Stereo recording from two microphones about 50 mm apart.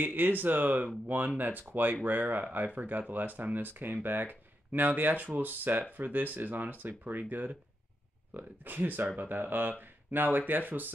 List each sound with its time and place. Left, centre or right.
0.0 s speech: right